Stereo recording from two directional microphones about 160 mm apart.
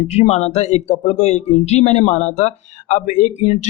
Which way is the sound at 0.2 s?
45° left (ahead or behind).